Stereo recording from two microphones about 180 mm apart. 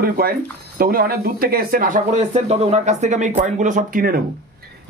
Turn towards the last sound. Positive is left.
turn(degrees=-55)  # may be behind; listen again after turning